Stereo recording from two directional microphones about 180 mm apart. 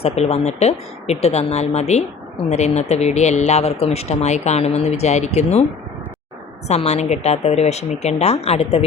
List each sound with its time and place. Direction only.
0.0 s speech: 35° left (ahead or behind)
6.7 s speech: 35° left (ahead or behind)